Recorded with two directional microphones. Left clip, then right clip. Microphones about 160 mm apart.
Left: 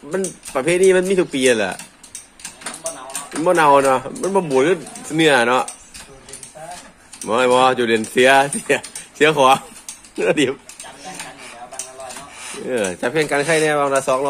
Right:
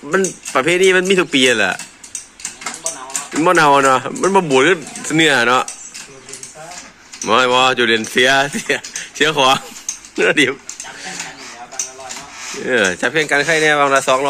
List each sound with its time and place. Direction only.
0.1 s speech: 25° right (ahead or behind)
3.4 s speech: 20° right (ahead or behind)
7.2 s speech: 5° right (ahead or behind)
12.6 s speech: 5° right (ahead or behind)